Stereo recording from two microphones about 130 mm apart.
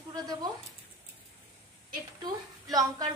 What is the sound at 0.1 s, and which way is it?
Speech, 30° right (ahead or behind).